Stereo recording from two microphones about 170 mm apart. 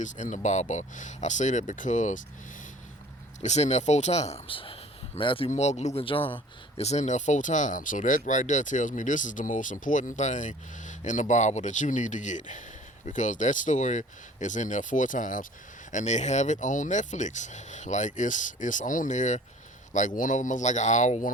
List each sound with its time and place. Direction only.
0.0 s speech: 45° left (ahead or behind)
3.4 s a man's voice: 40° left (ahead or behind)